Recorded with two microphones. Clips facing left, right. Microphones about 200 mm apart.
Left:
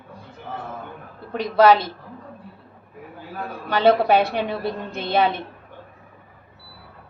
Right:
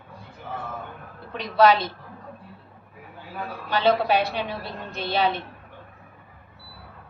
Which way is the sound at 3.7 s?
55° left (ahead or behind).